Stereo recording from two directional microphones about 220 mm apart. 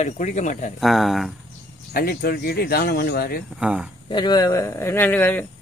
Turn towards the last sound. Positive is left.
turn(degrees=10)  # may be behind; listen again after turning